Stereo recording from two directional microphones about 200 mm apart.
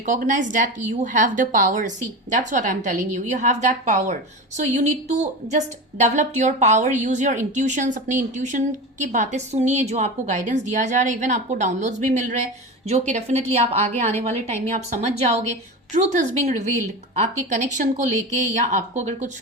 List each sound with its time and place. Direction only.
0.0 s a woman's voice: 40° right (ahead or behind)